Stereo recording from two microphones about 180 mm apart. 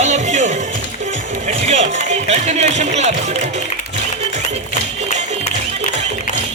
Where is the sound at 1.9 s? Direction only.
35° right (ahead or behind).